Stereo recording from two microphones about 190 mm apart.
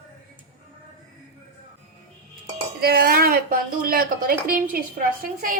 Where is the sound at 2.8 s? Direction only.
50° right (ahead or behind).